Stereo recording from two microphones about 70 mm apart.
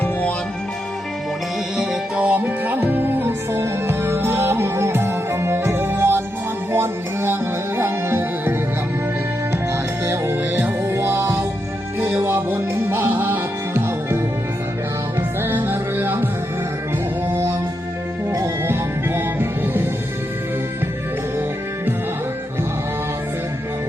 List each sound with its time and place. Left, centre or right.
0.0 s music: left
1.7 s music: centre; by 8.5 s right
10.1 s music: right
15.4 s music: right
18.7 s music: right